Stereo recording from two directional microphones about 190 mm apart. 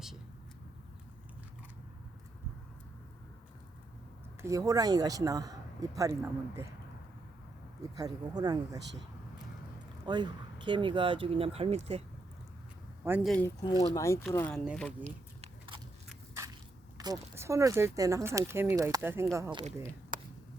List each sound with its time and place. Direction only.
4.4 s speech: 15° right (ahead or behind)
7.8 s speech: 20° right (ahead or behind)
10.1 s speech: 25° right (ahead or behind)
13.1 s speech: 10° right (ahead or behind)
13.9 s speech: 15° left (ahead or behind)
14.6 s speech: 5° right (ahead or behind)
15.4 s biting: 25° right (ahead or behind)
17.0 s speech: 15° right (ahead or behind)
20.1 s a sound: 45° right (ahead or behind)